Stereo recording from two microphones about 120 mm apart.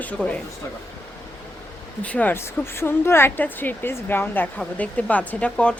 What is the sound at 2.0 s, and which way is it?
Speech, 10° left (ahead or behind).